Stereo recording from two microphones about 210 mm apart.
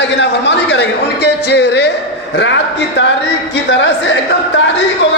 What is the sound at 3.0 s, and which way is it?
Speech, 55° left (ahead or behind).